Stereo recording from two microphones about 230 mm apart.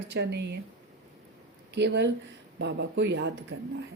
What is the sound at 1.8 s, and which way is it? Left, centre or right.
Speech, right.